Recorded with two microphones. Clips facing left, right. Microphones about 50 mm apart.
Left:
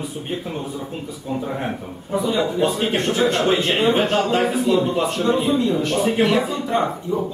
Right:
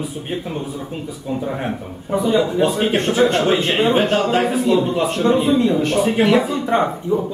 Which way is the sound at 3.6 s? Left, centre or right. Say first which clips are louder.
Right 2 dB; centre.